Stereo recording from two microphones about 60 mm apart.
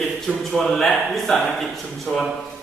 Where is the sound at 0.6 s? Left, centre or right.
Centre.